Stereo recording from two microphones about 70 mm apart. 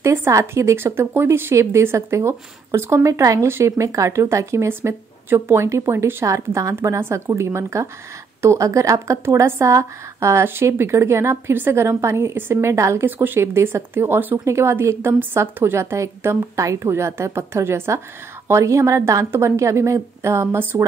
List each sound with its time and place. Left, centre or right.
0.0 s speech: right
6.2 s a woman's voice: right
6.7 s a woman's voice: right
13.0 s a woman's voice: right